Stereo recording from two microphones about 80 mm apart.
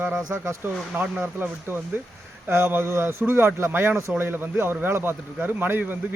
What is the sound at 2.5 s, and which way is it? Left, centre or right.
A man's voice, right.